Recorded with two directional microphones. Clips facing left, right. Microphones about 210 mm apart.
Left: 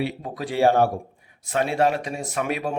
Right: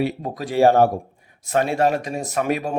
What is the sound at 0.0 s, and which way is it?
Speech, 45° right (ahead or behind).